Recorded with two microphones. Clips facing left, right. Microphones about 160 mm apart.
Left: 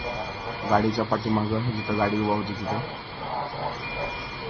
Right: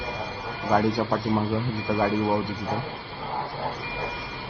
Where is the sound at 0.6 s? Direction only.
10° right (ahead or behind).